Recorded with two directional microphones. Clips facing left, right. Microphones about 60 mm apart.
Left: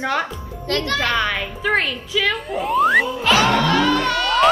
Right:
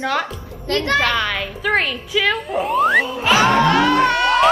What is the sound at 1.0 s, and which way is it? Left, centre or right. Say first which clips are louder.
Speech: right 1 dB; left.